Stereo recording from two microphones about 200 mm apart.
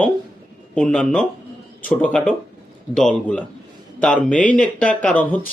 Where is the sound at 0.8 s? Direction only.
Centre (ahead or behind).